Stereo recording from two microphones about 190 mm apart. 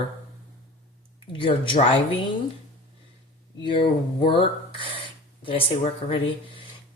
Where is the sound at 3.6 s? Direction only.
25° left (ahead or behind).